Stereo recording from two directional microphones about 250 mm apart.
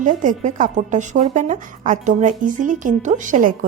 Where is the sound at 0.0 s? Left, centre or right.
Right.